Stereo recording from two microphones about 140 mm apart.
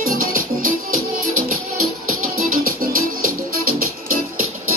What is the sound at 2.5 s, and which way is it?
Music, 90° right.